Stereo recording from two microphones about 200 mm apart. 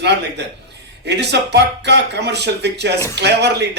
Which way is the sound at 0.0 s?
60° right (ahead or behind).